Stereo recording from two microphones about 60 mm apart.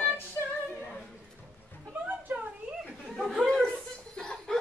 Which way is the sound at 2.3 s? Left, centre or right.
Right.